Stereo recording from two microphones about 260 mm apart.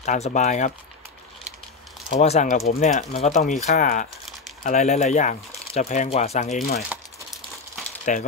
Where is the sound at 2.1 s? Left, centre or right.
Left.